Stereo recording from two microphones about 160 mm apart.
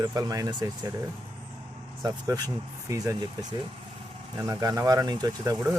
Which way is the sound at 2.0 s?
25° right (ahead or behind).